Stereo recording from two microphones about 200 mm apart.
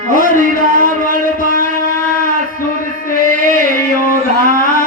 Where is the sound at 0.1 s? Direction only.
40° left (ahead or behind).